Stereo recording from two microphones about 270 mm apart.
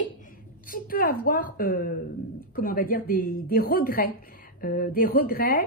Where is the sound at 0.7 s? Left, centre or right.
Left.